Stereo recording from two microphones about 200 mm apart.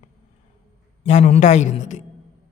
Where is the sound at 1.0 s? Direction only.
35° left (ahead or behind).